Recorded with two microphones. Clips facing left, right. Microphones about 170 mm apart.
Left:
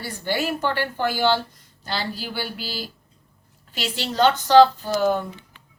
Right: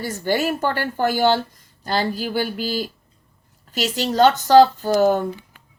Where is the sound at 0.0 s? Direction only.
45° right (ahead or behind).